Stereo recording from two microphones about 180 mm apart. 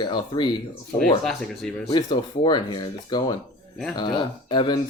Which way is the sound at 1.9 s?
25° left (ahead or behind).